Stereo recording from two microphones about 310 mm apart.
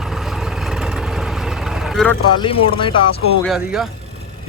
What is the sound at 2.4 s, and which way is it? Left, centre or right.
Speech, centre.